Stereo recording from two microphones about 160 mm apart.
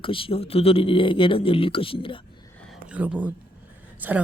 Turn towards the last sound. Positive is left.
turn(degrees=-10)  # may be behind; listen again after turning